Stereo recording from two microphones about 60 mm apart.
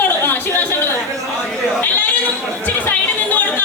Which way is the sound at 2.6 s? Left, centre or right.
Left.